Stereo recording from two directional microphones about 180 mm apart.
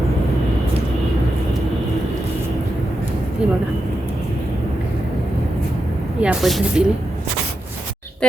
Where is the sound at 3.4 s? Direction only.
5° right (ahead or behind).